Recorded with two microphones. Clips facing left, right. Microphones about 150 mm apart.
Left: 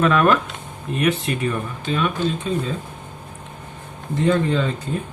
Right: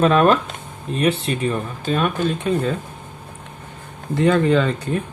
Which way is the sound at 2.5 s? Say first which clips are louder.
Right 6 dB; 60° right (ahead or behind).